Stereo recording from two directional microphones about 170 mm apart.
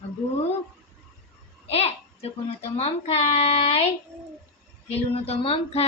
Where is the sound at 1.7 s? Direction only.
35° left (ahead or behind).